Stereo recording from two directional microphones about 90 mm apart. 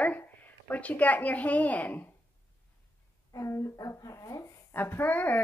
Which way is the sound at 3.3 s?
35° left (ahead or behind).